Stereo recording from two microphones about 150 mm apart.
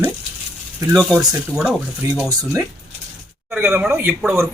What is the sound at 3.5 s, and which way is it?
Speech, 10° right (ahead or behind).